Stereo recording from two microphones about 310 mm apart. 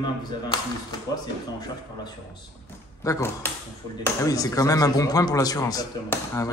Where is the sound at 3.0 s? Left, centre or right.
Centre.